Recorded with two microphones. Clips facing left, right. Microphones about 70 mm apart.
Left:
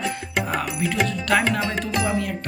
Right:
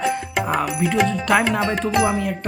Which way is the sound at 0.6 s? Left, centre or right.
Centre.